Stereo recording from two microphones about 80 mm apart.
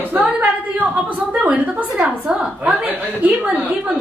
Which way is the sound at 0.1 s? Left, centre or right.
Right.